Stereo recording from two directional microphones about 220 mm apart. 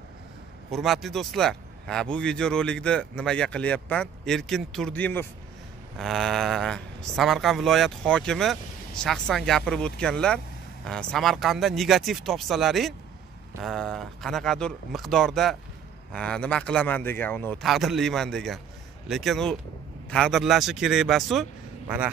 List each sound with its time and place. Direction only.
0.7 s speech: centre (ahead or behind)